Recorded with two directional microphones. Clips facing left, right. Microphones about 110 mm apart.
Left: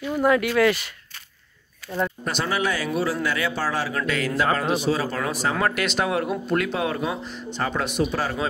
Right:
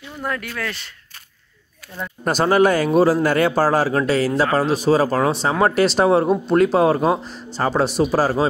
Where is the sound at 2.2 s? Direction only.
45° right (ahead or behind).